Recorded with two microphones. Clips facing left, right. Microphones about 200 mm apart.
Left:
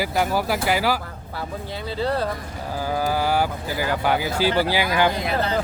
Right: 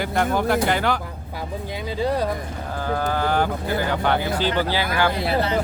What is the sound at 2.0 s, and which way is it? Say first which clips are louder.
Speech: right 1 dB; 15° right (ahead or behind).